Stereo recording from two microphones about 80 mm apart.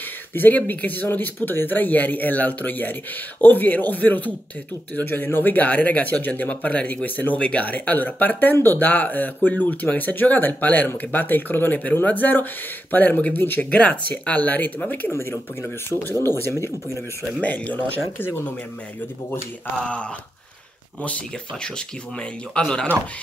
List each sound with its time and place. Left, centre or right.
0.3 s speech: left
17.4 s speech: centre
19.8 s speech: centre
22.5 s speech: centre